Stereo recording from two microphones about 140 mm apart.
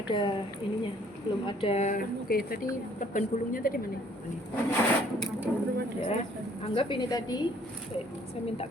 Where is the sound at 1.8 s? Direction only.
85° left.